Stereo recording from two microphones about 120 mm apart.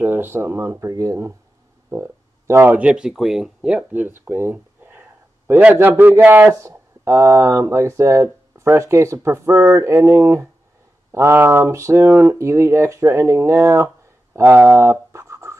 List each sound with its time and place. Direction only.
0.0 s a man's voice: 20° right (ahead or behind)